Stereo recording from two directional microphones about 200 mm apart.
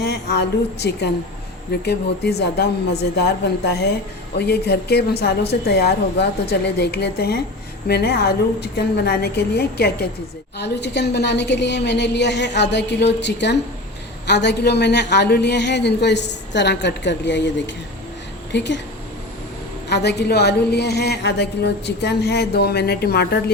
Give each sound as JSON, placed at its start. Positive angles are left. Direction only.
{"t": 0.0, "sound": "a woman's voice", "side_deg": 55}
{"t": 18.5, "sound": "a woman's voice", "side_deg": 60}
{"t": 19.9, "sound": "a woman's voice", "side_deg": 55}